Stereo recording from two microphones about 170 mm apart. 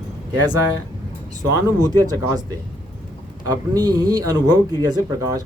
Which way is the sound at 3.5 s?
25° right (ahead or behind).